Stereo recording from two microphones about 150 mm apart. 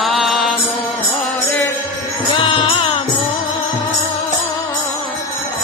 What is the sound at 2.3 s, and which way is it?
Music, 35° left (ahead or behind).